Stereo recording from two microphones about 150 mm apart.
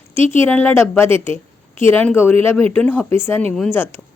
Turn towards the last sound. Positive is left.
turn(degrees=15)  # may be behind; listen again after turning